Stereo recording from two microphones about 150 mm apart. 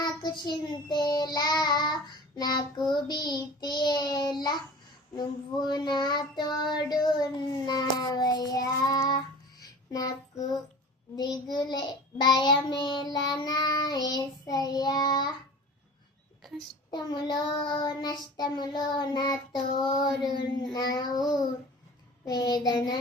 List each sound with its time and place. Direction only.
0.0 s child singing: 30° left (ahead or behind)
16.9 s child singing: 30° left (ahead or behind)
22.3 s child singing: 25° left (ahead or behind)